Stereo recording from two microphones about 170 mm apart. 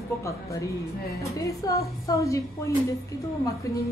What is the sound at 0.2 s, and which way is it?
A woman's voice, 20° left (ahead or behind).